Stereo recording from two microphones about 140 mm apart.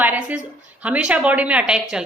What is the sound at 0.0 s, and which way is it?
A woman's voice, 10° right (ahead or behind).